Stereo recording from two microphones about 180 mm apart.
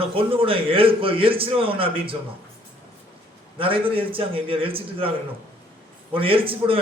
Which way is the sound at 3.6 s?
30° right (ahead or behind).